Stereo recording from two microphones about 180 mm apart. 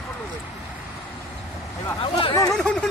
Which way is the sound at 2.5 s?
5° left (ahead or behind).